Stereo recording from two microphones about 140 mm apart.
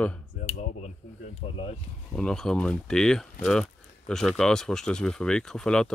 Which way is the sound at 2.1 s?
5° left (ahead or behind).